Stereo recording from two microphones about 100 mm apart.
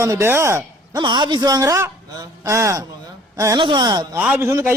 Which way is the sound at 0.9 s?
45° right (ahead or behind).